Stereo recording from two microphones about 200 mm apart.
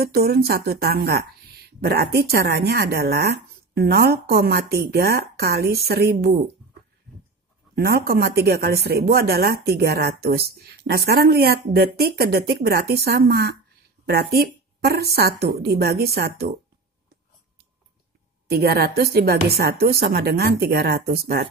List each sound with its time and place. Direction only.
0.0 s speech: 50° right (ahead or behind)
7.7 s speech: 50° right (ahead or behind)
18.5 s speech: 50° right (ahead or behind)